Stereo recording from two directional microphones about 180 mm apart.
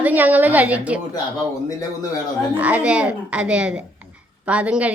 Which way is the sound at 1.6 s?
20° left (ahead or behind).